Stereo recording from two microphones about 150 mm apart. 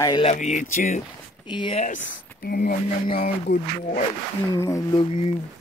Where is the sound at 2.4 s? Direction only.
90° left.